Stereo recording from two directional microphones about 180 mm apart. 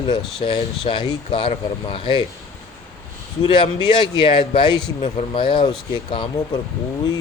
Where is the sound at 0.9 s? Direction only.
25° left (ahead or behind).